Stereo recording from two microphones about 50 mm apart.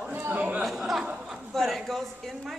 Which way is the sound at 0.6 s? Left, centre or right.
Centre.